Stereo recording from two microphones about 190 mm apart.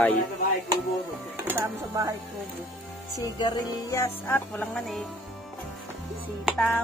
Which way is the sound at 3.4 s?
15° left (ahead or behind).